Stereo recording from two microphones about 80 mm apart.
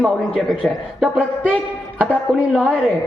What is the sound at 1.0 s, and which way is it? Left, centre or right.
Speech, centre.